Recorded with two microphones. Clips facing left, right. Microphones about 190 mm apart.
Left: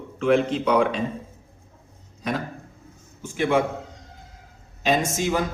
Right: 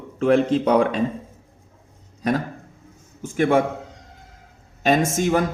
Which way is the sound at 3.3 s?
45° right (ahead or behind).